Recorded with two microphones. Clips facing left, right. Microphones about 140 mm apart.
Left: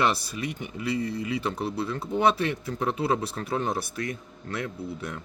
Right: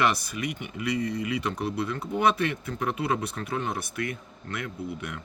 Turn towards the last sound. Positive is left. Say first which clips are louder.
# even
turn(degrees=30)  # may be behind; listen again after turning